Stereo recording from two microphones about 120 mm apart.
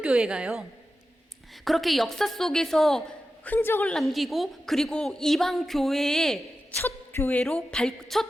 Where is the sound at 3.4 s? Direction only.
15° left (ahead or behind).